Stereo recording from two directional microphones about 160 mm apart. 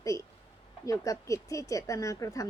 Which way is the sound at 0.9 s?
20° left (ahead or behind).